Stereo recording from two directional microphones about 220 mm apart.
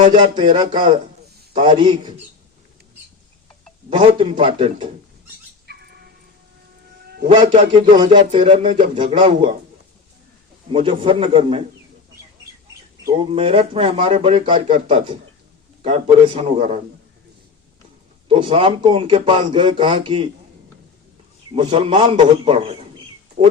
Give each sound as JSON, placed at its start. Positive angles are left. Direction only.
{"t": 0.0, "sound": "speech", "side_deg": -20}
{"t": 3.8, "sound": "speech", "side_deg": -25}
{"t": 5.6, "sound": "a sound", "side_deg": -45}
{"t": 7.3, "sound": "speech", "side_deg": -25}
{"t": 10.7, "sound": "speech", "side_deg": -25}
{"t": 13.1, "sound": "speech", "side_deg": -25}
{"t": 18.3, "sound": "speech", "side_deg": -25}
{"t": 21.5, "sound": "speech", "side_deg": -25}